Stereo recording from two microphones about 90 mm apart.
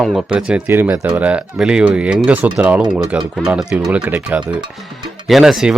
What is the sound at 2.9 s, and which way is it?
Speech, 5° right (ahead or behind).